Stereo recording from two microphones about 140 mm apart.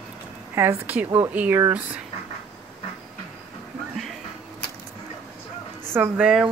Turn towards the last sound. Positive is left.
turn(degrees=-15)  # may be behind; listen again after turning